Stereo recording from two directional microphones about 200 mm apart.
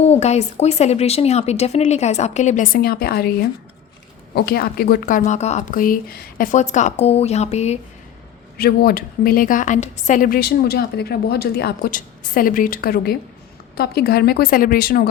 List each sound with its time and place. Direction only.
0.0 s speech: 30° left (ahead or behind)
8.5 s a woman's voice: 50° left (ahead or behind)